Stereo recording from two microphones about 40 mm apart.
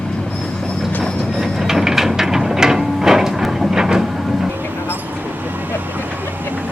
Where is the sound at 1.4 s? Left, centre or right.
Centre.